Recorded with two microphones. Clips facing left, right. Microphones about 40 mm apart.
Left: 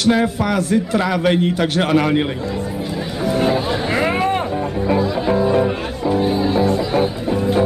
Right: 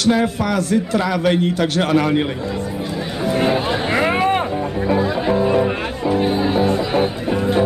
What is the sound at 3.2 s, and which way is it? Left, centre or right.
Music, centre.